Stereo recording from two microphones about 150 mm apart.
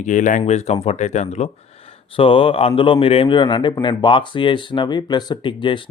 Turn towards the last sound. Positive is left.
turn(degrees=35)  # may be behind; listen again after turning